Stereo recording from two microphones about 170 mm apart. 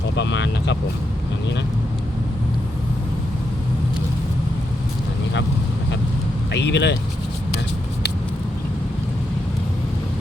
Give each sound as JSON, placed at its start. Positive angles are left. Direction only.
{"t": 0.2, "sound": "speech", "side_deg": 90}
{"t": 6.5, "sound": "speech", "side_deg": 90}